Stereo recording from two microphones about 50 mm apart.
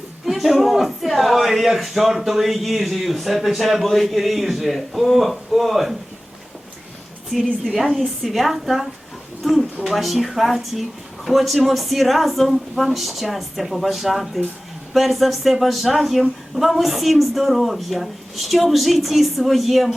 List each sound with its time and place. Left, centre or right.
0.3 s a man's voice: centre
7.6 s a man's voice: centre